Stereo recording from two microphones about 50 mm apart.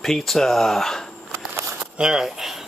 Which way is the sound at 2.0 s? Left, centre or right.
Centre.